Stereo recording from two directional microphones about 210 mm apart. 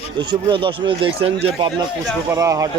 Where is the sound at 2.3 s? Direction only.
15° right (ahead or behind).